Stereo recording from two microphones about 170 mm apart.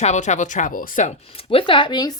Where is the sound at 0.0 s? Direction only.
45° left (ahead or behind).